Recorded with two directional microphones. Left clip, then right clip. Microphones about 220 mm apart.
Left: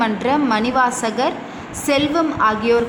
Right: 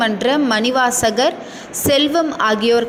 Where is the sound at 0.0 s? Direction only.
15° right (ahead or behind).